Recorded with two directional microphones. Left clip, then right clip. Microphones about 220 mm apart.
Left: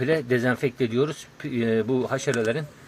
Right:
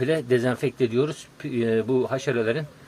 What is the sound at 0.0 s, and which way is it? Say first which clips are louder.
Speech: even; 5° right (ahead or behind).